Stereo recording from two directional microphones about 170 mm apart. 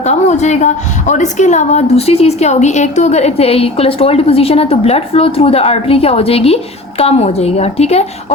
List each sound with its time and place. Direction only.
0.0 s a woman's voice: 40° left (ahead or behind)